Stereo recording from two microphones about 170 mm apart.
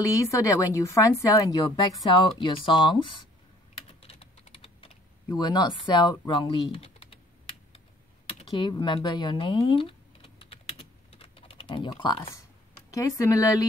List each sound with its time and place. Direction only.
0.0 s a woman's voice: 20° left (ahead or behind)
2.0 s speech: 30° left (ahead or behind)
4.0 s typing: 35° left (ahead or behind)
5.3 s speech: 25° left (ahead or behind)
8.3 s computer keyboard: 30° left (ahead or behind)
12.9 s speech: 20° left (ahead or behind)